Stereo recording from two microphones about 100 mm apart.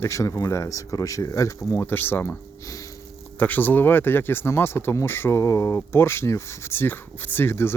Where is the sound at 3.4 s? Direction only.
15° left (ahead or behind).